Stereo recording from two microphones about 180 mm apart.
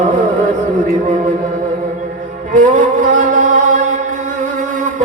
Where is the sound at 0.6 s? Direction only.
45° right (ahead or behind).